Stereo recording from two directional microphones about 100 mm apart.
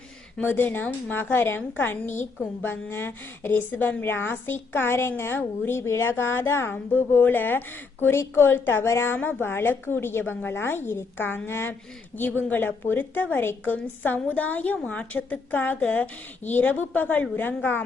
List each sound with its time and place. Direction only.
0.3 s a woman's voice: 20° left (ahead or behind)